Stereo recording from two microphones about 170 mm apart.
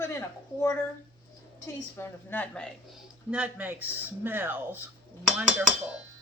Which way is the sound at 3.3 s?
10° right (ahead or behind).